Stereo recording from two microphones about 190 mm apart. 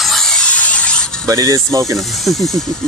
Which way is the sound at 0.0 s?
Centre (ahead or behind).